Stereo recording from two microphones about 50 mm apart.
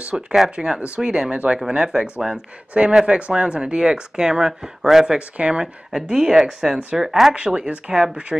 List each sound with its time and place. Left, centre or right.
0.1 s speech: centre
3.2 s speech: right; by 7.3 s centre
7.3 s speech: centre